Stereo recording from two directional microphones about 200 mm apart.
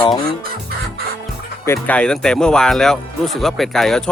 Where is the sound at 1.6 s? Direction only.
10° left (ahead or behind).